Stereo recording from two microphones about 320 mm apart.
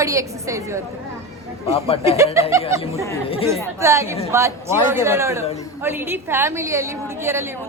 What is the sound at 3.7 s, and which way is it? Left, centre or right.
A woman's voice, centre.